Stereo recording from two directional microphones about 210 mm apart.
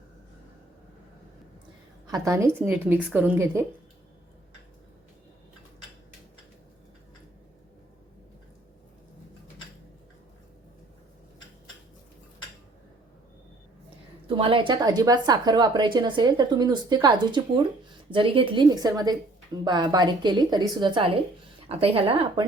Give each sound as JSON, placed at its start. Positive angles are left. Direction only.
{"t": 2.0, "sound": "a woman's voice", "side_deg": -15}
{"t": 14.3, "sound": "a woman's voice", "side_deg": -25}